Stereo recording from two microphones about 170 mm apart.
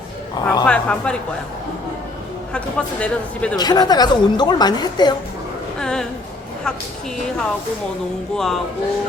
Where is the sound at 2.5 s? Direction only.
5° left (ahead or behind).